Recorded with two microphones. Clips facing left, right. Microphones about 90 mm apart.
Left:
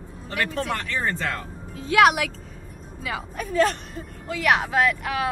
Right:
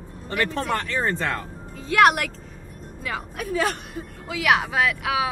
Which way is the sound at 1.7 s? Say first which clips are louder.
Even; centre (ahead or behind).